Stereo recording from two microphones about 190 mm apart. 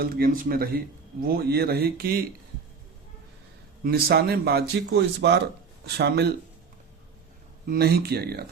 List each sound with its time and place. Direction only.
0.0 s speech: 50° right (ahead or behind)
3.8 s speech: 55° right (ahead or behind)
7.7 s speech: 55° right (ahead or behind)